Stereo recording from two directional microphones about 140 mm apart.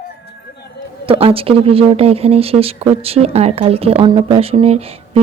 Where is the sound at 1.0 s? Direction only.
40° right (ahead or behind).